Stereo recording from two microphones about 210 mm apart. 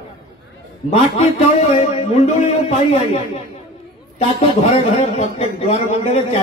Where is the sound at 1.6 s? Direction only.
30° left (ahead or behind).